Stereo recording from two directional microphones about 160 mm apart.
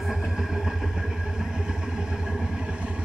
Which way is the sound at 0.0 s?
Centre (ahead or behind).